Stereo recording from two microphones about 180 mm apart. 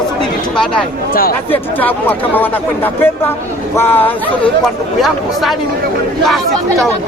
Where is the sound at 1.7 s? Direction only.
10° left (ahead or behind).